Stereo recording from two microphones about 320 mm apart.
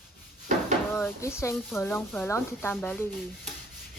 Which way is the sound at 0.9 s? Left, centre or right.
Centre.